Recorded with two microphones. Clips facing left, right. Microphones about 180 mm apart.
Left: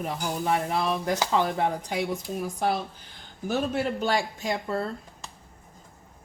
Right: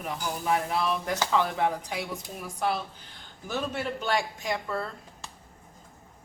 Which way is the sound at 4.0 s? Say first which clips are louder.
Left 2 dB; 35° left (ahead or behind).